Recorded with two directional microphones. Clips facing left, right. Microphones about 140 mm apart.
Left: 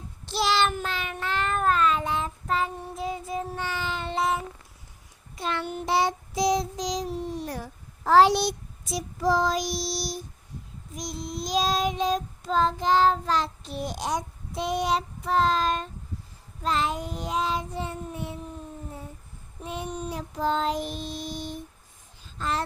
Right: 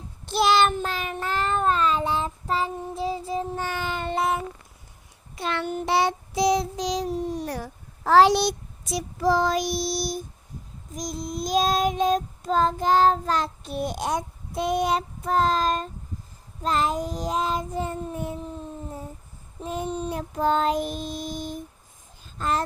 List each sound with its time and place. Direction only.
0.3 s child singing: 50° right (ahead or behind); by 3.6 s 30° right (ahead or behind)
3.6 s child singing: 50° right (ahead or behind)
5.3 s child singing: 70° right (ahead or behind)
7.4 s a child's voice: 70° right (ahead or behind); by 10.2 s 55° right (ahead or behind)
10.9 s child singing: 45° right (ahead or behind)
19.6 s child singing: 40° right (ahead or behind)
20.1 s child singing: 50° right (ahead or behind)
22.4 s speech: 45° right (ahead or behind)